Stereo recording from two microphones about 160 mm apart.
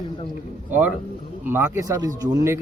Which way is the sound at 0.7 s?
10° right (ahead or behind).